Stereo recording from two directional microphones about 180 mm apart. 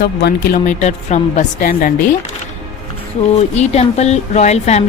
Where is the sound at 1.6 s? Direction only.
55° left (ahead or behind).